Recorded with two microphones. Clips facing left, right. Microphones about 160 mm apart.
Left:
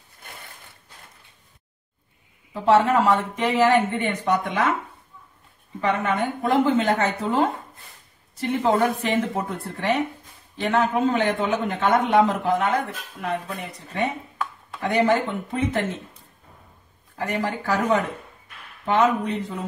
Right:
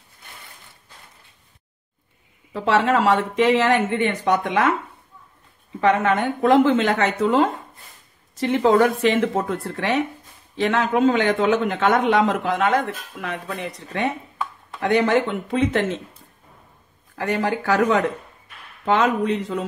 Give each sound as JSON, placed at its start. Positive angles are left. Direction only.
{"t": 2.5, "sound": "speech", "side_deg": -90}
{"t": 5.8, "sound": "a man's voice", "side_deg": -85}
{"t": 15.0, "sound": "speech", "side_deg": -80}
{"t": 17.2, "sound": "a man's voice", "side_deg": -90}
{"t": 18.9, "sound": "a man's voice", "side_deg": -90}